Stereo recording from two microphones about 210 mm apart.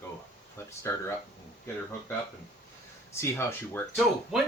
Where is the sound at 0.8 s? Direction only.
10° left (ahead or behind).